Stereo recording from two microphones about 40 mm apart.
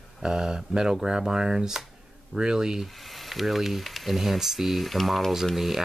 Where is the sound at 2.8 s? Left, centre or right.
Centre.